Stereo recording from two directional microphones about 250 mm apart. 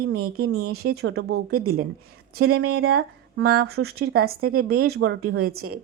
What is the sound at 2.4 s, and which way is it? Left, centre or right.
Speech, right.